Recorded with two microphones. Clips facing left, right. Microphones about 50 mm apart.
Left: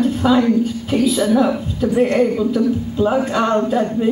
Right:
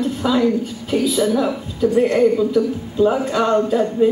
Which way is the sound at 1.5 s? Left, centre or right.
Centre.